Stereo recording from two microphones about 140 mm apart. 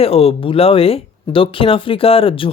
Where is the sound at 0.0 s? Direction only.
45° left (ahead or behind).